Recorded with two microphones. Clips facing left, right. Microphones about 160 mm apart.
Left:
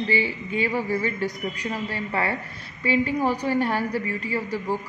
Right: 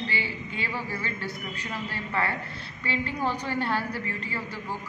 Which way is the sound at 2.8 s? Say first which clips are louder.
Left 7 dB; 10° left (ahead or behind).